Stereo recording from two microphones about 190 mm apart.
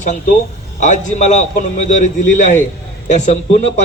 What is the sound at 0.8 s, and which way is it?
A man's voice, 40° left (ahead or behind).